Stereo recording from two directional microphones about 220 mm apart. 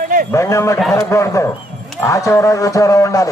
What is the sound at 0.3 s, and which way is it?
A man's voice, 15° left (ahead or behind).